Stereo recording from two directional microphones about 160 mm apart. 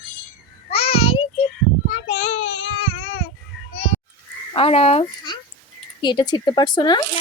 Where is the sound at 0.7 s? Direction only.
40° left (ahead or behind).